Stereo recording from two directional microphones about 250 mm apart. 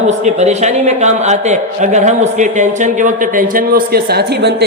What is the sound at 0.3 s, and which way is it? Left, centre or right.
A man's voice, right.